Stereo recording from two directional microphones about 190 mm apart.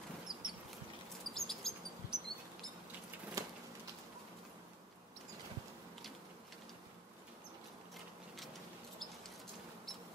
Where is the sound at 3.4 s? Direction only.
15° right (ahead or behind).